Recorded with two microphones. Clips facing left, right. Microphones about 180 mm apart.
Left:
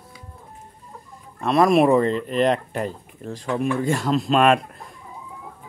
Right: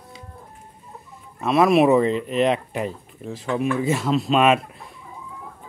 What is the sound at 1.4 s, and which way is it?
Speech, centre (ahead or behind).